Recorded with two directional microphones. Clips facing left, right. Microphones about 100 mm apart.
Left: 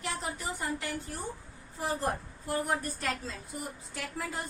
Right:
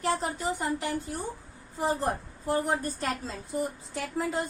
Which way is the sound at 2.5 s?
30° right (ahead or behind).